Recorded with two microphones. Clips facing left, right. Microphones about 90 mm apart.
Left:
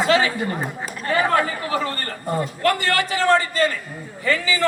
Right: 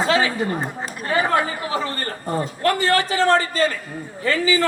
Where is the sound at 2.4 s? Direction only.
35° right (ahead or behind).